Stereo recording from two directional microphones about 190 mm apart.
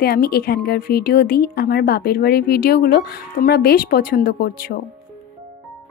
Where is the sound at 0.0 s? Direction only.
50° left (ahead or behind).